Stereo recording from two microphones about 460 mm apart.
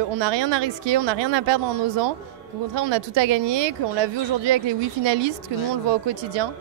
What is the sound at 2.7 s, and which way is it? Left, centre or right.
Speech, right.